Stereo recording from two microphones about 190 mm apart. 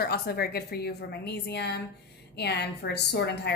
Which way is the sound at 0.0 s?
55° left (ahead or behind).